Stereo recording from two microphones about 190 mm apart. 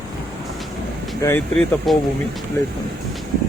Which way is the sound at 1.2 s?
20° left (ahead or behind).